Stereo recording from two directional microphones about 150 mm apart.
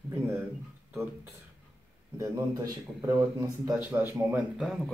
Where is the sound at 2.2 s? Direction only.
20° right (ahead or behind).